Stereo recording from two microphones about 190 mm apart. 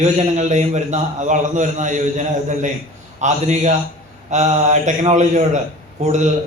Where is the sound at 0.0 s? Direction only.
40° right (ahead or behind).